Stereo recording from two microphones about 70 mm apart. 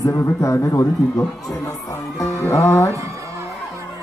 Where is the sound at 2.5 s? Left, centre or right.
Left.